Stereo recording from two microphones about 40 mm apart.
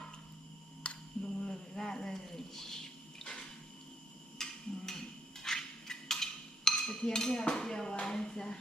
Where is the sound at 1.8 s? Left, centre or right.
Centre.